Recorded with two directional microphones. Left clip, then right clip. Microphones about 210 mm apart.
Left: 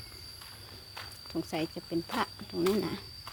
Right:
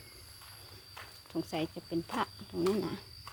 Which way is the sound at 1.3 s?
5° right (ahead or behind).